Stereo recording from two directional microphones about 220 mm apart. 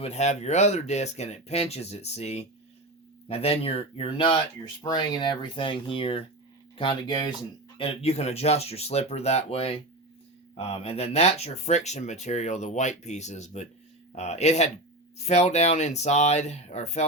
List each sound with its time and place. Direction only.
0.0 s speech: 30° left (ahead or behind)